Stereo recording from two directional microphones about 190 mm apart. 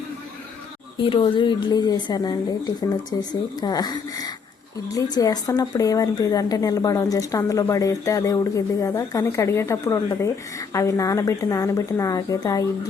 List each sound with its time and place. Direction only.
0.9 s a woman's voice: 25° left (ahead or behind)